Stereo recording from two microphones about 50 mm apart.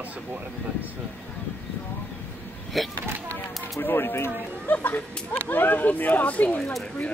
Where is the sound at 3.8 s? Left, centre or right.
Left.